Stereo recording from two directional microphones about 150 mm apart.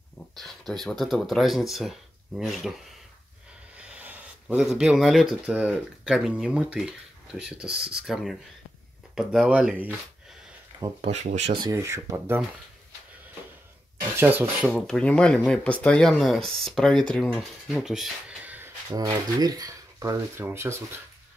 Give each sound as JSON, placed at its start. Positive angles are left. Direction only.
{"t": 0.4, "sound": "speech", "side_deg": 0}
{"t": 11.0, "sound": "speech", "side_deg": -50}
{"t": 11.6, "sound": "speech", "side_deg": -20}
{"t": 14.1, "sound": "speech", "side_deg": -15}
{"t": 14.7, "sound": "speech", "side_deg": 5}
{"t": 19.4, "sound": "speech", "side_deg": -25}